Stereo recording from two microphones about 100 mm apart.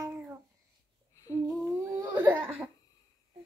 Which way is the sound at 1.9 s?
35° right (ahead or behind).